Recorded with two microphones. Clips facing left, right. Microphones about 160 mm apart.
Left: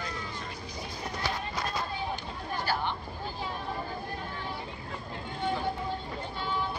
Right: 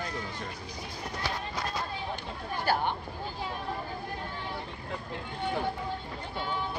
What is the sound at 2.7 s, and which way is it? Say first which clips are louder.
Speech: right 4 dB; 50° right (ahead or behind).